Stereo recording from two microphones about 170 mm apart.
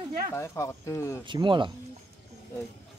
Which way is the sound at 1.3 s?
30° right (ahead or behind).